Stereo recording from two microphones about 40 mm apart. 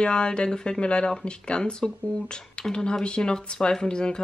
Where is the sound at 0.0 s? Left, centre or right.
Left.